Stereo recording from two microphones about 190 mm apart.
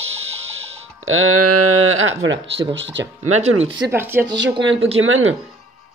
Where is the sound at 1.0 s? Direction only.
90° right.